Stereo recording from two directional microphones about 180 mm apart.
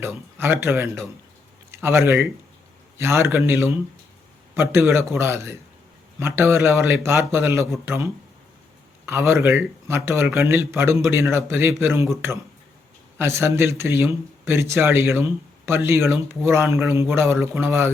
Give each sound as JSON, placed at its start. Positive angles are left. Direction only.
{"t": 0.0, "sound": "a man's voice", "side_deg": -15}
{"t": 13.1, "sound": "a man's voice", "side_deg": -15}